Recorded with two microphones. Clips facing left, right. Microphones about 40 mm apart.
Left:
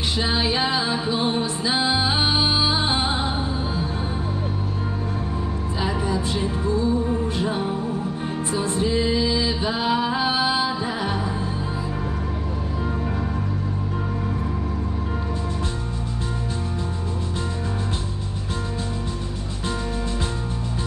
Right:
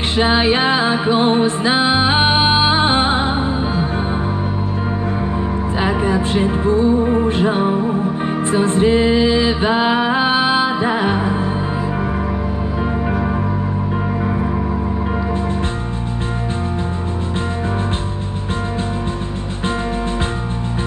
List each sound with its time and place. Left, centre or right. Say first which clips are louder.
0.2 s music: right 9 dB; right
5.8 s music: right 7 dB; right